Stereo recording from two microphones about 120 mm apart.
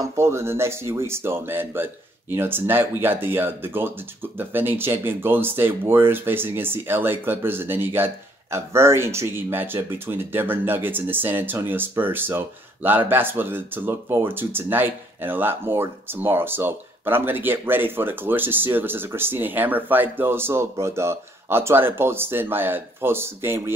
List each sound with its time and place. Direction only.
0.0 s speech: 20° right (ahead or behind)